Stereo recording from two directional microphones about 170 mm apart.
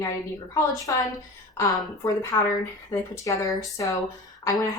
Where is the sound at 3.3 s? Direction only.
20° left (ahead or behind).